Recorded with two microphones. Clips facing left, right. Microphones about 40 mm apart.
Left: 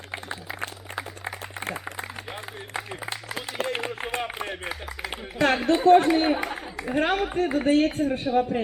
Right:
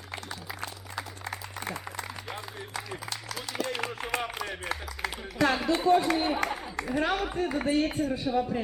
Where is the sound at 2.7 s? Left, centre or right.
Left.